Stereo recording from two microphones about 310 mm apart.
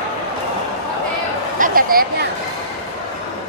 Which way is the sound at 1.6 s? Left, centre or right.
Right.